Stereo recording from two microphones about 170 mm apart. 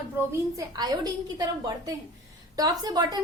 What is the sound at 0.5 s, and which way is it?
A woman's voice, 25° right (ahead or behind).